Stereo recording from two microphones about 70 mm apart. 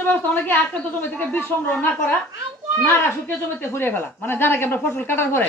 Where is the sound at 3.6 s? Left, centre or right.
Left.